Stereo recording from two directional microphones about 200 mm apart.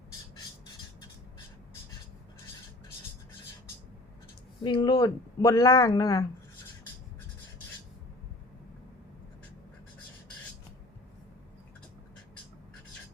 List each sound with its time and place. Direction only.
4.6 s speech: 20° left (ahead or behind)